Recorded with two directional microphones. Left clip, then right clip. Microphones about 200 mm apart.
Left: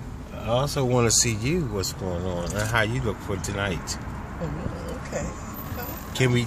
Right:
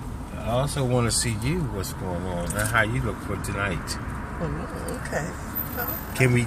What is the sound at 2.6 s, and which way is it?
Speech, 40° left (ahead or behind).